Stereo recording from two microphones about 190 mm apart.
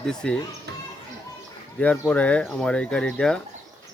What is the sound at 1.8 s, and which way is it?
Speech, 5° left (ahead or behind).